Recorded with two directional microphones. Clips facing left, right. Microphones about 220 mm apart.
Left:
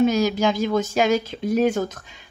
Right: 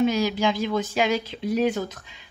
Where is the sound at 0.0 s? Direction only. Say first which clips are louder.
Left 3 dB; 45° left (ahead or behind).